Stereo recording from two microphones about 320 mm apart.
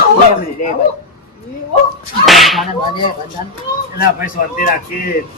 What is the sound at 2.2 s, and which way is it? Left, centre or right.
Whip, centre.